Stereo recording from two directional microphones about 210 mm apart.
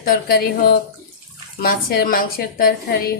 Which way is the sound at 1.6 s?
45° left (ahead or behind).